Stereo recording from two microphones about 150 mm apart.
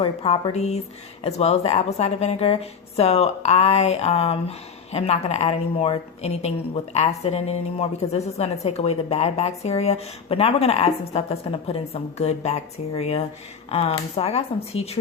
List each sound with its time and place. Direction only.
0.0 s a woman's voice: 40° left (ahead or behind)